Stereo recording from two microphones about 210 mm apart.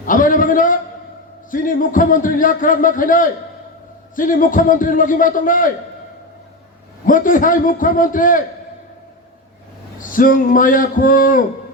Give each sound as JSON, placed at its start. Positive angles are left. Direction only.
{"t": 0.0, "sound": "a man's voice", "side_deg": 40}
{"t": 7.0, "sound": "a man's voice", "side_deg": 40}
{"t": 10.0, "sound": "a man's voice", "side_deg": 40}